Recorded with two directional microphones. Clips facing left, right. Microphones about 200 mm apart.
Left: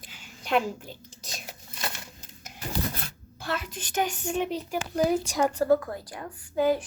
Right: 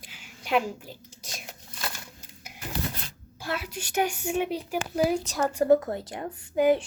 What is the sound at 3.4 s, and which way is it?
Speech, 10° right (ahead or behind).